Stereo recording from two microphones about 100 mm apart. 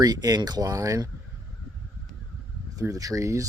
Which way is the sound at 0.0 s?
40° right (ahead or behind).